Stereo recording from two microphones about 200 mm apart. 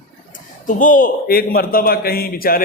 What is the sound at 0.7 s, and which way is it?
A man's voice, 40° left (ahead or behind).